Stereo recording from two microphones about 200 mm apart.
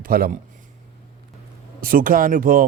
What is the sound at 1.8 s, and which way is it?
Speech, 45° right (ahead or behind).